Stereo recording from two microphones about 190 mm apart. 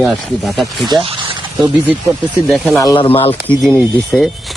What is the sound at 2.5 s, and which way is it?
Speech, centre (ahead or behind).